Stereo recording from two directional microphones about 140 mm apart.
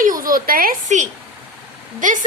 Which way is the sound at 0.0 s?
75° right (ahead or behind).